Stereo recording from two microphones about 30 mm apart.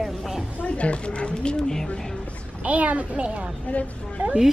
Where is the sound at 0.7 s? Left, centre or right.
Left.